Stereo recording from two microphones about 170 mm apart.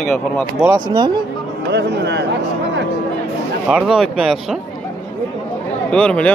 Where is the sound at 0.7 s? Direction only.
25° right (ahead or behind).